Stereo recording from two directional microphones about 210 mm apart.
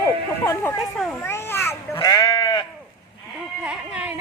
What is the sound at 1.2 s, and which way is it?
Sheep, 10° left (ahead or behind).